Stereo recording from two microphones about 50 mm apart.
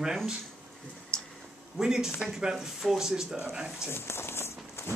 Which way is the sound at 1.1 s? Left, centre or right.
Right.